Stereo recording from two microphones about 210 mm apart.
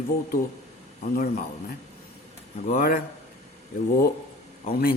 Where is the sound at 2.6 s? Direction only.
40° left (ahead or behind).